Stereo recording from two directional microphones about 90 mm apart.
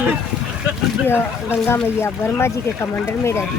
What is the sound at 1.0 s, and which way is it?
Speech, 25° left (ahead or behind).